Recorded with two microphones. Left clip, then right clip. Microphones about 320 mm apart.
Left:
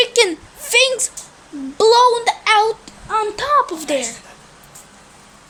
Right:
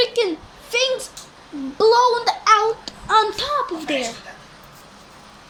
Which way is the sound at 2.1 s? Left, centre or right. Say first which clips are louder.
Left 1 dB; centre.